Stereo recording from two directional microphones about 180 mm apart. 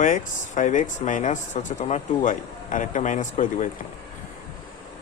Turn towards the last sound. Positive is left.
turn(degrees=45)  # may be behind; listen again after turning